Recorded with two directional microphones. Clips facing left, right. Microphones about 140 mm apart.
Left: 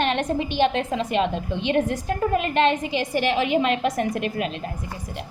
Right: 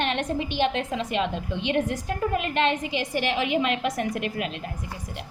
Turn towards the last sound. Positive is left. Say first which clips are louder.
# left 3 dB
turn(degrees=30)  # may be behind; listen again after turning